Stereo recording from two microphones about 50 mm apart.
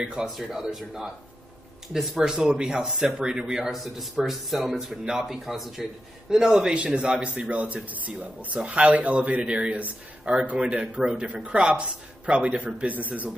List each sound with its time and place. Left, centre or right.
0.0 s a man's voice: centre
6.3 s a man's voice: centre; by 13.3 s right